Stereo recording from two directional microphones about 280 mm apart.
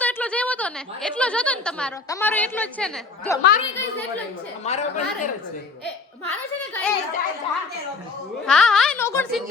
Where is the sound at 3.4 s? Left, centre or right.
Left.